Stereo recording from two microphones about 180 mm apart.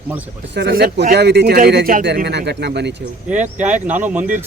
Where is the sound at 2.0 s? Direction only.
65° right (ahead or behind).